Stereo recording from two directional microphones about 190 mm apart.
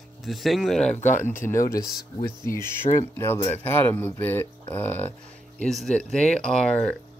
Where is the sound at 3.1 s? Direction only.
10° left (ahead or behind).